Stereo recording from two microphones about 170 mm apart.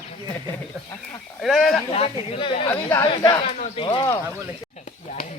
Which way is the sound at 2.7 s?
15° left (ahead or behind).